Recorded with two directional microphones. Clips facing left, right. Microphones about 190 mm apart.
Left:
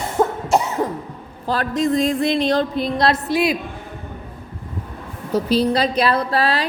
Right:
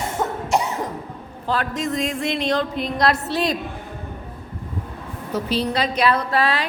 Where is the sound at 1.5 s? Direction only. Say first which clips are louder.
Left 4 dB; 35° left (ahead or behind).